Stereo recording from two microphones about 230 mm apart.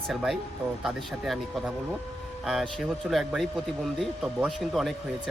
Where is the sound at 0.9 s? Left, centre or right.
Centre.